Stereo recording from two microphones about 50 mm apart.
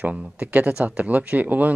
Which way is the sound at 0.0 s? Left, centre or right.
Right.